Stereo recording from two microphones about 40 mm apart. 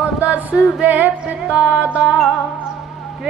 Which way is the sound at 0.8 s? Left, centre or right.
Right.